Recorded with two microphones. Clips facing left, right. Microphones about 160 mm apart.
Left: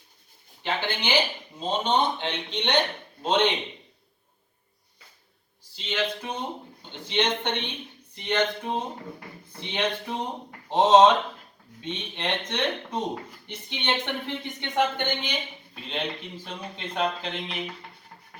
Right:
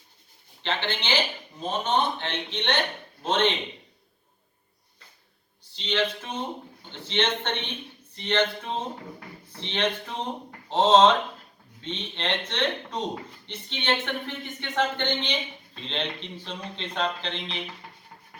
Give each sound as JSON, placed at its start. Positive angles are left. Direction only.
{"t": 0.6, "sound": "speech", "side_deg": 10}
{"t": 5.7, "sound": "speech", "side_deg": 5}